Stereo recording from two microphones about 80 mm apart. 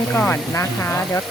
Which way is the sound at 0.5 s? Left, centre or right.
Left.